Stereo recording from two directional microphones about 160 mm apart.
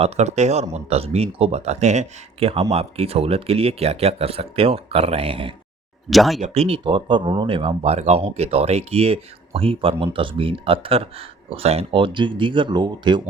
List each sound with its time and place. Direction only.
0.0 s speech: 45° right (ahead or behind)
6.1 s speech: centre (ahead or behind)
6.4 s speech: 40° right (ahead or behind)